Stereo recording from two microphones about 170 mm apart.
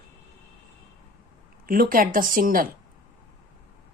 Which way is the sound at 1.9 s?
55° right (ahead or behind).